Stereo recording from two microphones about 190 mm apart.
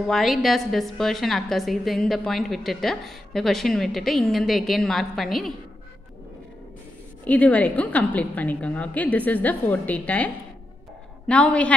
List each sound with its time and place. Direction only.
0.1 s a woman's voice: centre (ahead or behind)
7.2 s a woman's voice: 5° left (ahead or behind)